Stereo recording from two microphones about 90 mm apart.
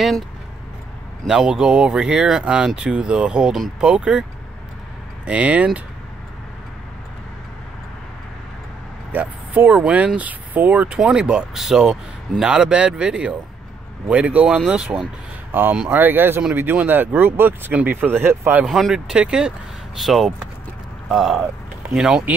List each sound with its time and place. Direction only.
1.2 s speech: 5° right (ahead or behind)
9.1 s speech: 15° right (ahead or behind)
15.5 s speech: 20° right (ahead or behind)
18.7 s speech: centre (ahead or behind)